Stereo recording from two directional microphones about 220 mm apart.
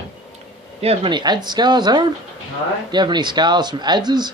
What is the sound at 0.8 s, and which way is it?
Speech, 25° right (ahead or behind).